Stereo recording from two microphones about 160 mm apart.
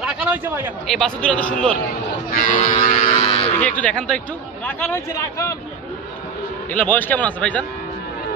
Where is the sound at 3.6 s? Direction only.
10° left (ahead or behind).